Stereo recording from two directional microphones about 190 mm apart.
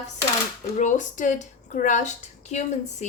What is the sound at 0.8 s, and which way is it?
A woman's voice, 40° left (ahead or behind).